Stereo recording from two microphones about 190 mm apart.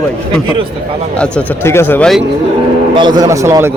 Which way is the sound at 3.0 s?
20° right (ahead or behind).